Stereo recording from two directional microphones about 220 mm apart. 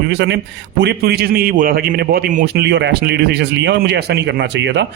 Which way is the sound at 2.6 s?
50° right (ahead or behind).